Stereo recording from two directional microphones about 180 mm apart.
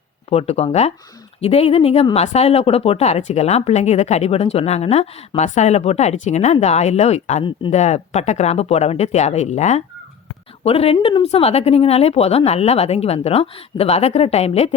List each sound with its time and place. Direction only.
0.3 s speech: 35° left (ahead or behind)